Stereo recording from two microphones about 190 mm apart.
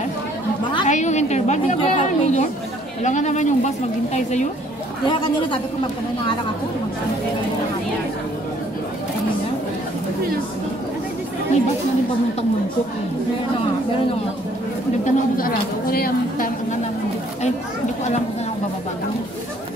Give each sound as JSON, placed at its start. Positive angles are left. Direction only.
{"t": 0.8, "sound": "a woman's voice", "side_deg": 40}
{"t": 5.0, "sound": "speech", "side_deg": 25}
{"t": 15.0, "sound": "a woman's voice", "side_deg": 50}